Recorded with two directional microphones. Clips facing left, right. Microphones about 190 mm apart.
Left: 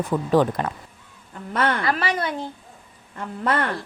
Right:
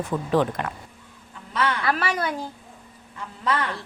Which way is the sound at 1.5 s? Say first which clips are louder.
Left 3 dB; 50° left (ahead or behind).